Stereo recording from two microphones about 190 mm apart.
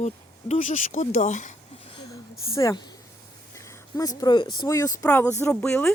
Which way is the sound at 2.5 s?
20° left (ahead or behind).